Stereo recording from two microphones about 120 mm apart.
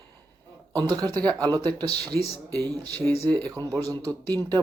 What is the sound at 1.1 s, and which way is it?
Speech, 10° left (ahead or behind).